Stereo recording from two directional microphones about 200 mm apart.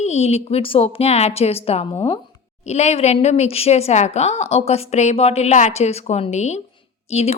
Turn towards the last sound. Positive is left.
turn(degrees=30)  # may be behind; listen again after turning